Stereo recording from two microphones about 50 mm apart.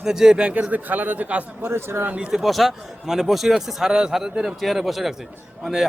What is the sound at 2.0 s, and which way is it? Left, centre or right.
Speech, right.